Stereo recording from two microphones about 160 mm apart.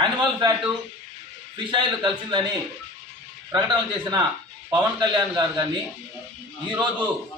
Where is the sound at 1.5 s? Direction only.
30° right (ahead or behind).